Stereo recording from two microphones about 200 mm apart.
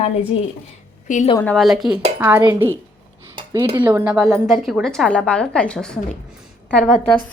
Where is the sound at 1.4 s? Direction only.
5° left (ahead or behind); by 2.7 s 10° right (ahead or behind).